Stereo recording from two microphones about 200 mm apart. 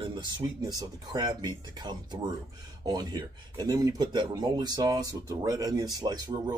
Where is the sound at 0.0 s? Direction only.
20° right (ahead or behind).